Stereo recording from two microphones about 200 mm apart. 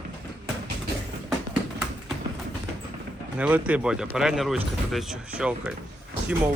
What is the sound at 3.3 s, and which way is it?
Speech, 5° right (ahead or behind).